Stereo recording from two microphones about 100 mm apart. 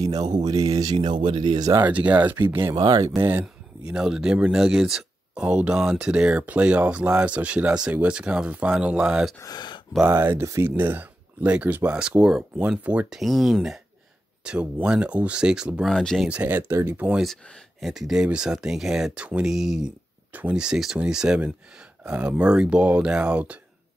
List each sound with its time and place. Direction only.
0.0 s speech: 40° right (ahead or behind)
0.9 s speech: 55° right (ahead or behind)
1.9 s speech: 15° right (ahead or behind)
2.7 s speech: 40° right (ahead or behind)
3.2 s a sound: 20° right (ahead or behind)
3.9 s speech: 5° right (ahead or behind)
9.4 s speech: 45° left (ahead or behind)
10.0 s speech: 25° right (ahead or behind); by 15.9 s 10° right (ahead or behind)
15.9 s speech: 5° left (ahead or behind)
16.3 s speech: 15° right (ahead or behind)
16.9 s speech: 15° right (ahead or behind)
17.2 s speech: centre (ahead or behind)